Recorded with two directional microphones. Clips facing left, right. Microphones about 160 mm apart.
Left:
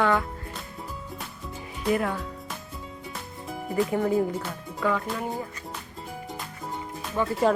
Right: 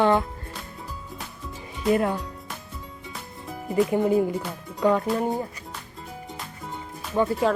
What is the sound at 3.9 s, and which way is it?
Speech, 15° right (ahead or behind).